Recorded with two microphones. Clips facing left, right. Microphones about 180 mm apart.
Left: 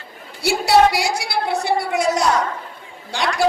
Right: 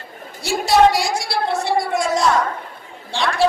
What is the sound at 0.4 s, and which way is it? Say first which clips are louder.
Speech: even; 70° left (ahead or behind).